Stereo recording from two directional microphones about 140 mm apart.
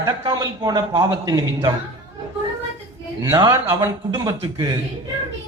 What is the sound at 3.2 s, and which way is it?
A woman's voice, 20° right (ahead or behind).